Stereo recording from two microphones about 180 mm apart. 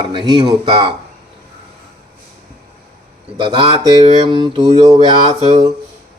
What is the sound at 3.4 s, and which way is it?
Mantra, 25° right (ahead or behind).